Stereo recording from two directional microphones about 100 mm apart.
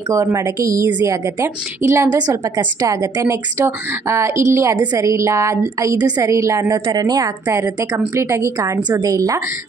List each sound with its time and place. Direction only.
0.1 s a woman's voice: 25° right (ahead or behind)
2.0 s a woman's voice: 40° right (ahead or behind)
6.9 s a woman's voice: 40° right (ahead or behind)